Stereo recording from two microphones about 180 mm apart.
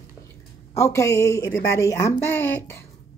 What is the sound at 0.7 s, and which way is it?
Speech, 15° left (ahead or behind).